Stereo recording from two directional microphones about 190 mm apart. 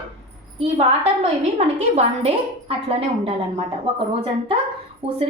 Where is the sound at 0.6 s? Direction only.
30° right (ahead or behind).